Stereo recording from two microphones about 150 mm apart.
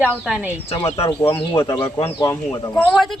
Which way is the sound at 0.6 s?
40° left (ahead or behind).